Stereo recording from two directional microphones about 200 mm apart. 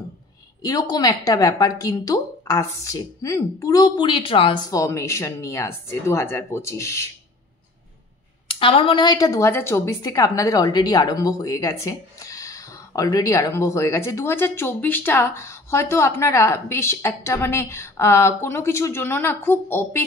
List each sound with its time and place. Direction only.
0.6 s a woman's voice: 20° left (ahead or behind)
8.5 s a woman's voice: 25° left (ahead or behind); by 20.0 s 10° left (ahead or behind)